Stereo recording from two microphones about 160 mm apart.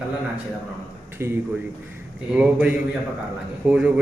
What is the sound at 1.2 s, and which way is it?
Mantra, 15° right (ahead or behind).